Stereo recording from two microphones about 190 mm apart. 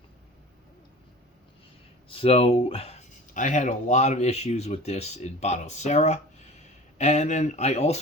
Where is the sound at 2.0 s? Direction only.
30° left (ahead or behind).